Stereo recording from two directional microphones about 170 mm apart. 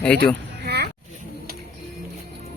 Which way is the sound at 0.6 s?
75° right (ahead or behind).